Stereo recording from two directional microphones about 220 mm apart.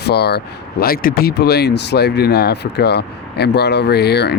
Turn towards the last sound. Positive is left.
turn(degrees=50)  # may be behind; listen again after turning